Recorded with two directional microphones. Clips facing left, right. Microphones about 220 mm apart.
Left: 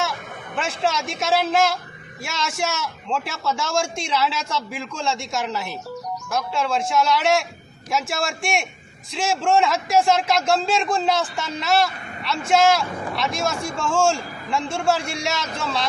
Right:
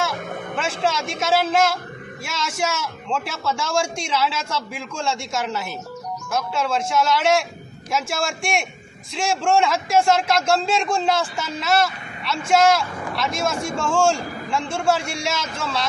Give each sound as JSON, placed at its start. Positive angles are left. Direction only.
{"t": 0.5, "sound": "a man's voice", "side_deg": 0}